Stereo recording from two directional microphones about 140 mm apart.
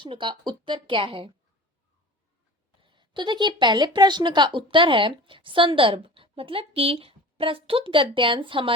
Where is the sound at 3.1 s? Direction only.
35° right (ahead or behind).